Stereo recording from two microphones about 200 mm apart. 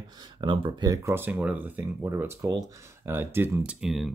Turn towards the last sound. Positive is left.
turn(degrees=0)  # may be behind; listen again after turning